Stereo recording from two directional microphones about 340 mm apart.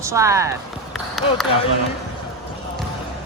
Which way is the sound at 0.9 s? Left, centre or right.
Centre.